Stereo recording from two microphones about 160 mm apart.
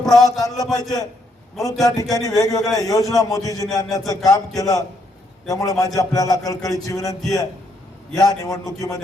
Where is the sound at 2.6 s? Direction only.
Centre (ahead or behind).